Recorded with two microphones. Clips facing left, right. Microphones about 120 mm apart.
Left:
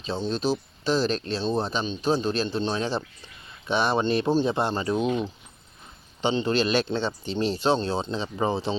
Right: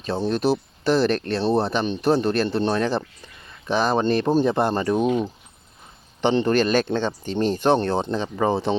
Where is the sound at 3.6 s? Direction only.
40° right (ahead or behind).